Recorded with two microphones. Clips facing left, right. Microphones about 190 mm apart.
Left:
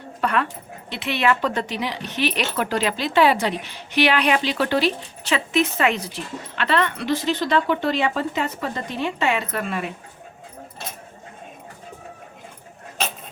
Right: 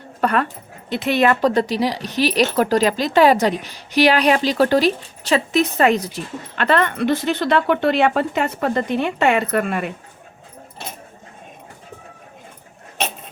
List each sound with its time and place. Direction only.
0.2 s speech: 45° right (ahead or behind)